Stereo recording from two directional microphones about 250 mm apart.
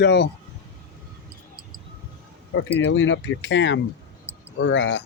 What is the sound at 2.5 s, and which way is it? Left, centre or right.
Speech, left.